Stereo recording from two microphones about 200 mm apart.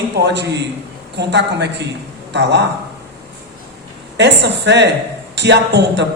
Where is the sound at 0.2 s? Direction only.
60° right (ahead or behind).